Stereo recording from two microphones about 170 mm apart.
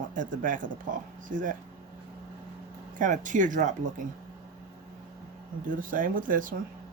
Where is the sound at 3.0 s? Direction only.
50° right (ahead or behind).